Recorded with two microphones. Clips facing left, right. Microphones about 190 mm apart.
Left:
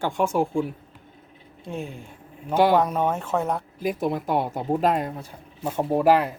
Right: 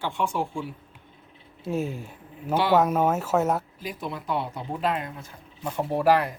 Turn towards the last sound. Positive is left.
turn(degrees=15)  # may be behind; listen again after turning